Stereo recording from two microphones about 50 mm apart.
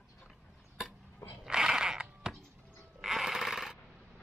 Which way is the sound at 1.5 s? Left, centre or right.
Centre.